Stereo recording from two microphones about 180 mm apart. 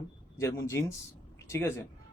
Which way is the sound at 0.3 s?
15° left (ahead or behind).